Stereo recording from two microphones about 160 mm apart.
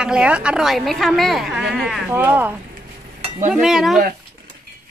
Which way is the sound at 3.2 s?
50° right (ahead or behind).